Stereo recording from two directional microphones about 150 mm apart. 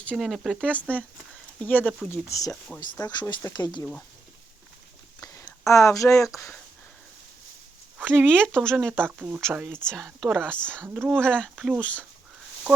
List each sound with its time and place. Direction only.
0.2 s speech: centre (ahead or behind)
0.6 s speech: 10° left (ahead or behind)
2.5 s speech: 5° left (ahead or behind)
3.0 s speech: 25° left (ahead or behind)
5.2 s speech: 20° left (ahead or behind)
8.0 s speech: 5° left (ahead or behind)
9.0 s speech: 10° right (ahead or behind)
9.7 s speech: 5° left (ahead or behind)
10.8 s speech: 15° right (ahead or behind)
11.1 s speech: 5° left (ahead or behind)